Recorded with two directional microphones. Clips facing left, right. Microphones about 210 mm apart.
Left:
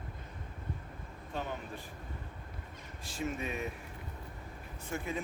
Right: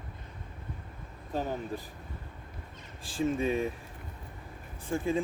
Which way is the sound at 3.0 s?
30° right (ahead or behind).